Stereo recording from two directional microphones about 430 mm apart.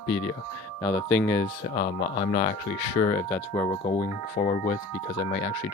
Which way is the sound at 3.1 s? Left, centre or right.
Centre.